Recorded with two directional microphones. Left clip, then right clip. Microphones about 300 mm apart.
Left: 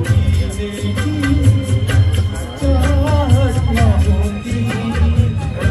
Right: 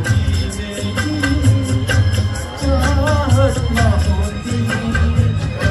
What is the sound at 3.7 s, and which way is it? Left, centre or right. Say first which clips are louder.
Music: even; right.